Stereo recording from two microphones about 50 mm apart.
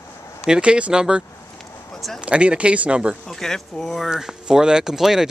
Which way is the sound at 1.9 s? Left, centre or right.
Centre.